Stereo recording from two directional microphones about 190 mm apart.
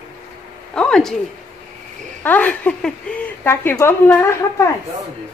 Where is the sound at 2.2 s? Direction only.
10° left (ahead or behind).